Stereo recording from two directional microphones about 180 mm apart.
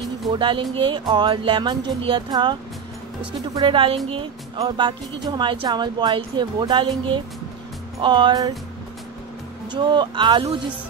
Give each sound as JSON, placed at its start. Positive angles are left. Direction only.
{"t": 0.3, "sound": "speech", "side_deg": -25}
{"t": 3.5, "sound": "speech", "side_deg": -30}
{"t": 8.0, "sound": "speech", "side_deg": -25}
{"t": 9.7, "sound": "speech", "side_deg": -25}